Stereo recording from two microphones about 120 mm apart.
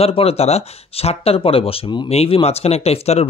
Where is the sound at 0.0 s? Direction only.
55° left (ahead or behind).